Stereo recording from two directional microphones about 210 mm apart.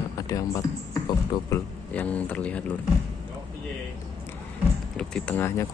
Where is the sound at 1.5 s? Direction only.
5° left (ahead or behind).